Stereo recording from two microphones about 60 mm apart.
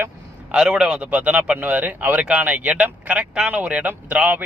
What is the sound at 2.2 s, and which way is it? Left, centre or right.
Speech, right.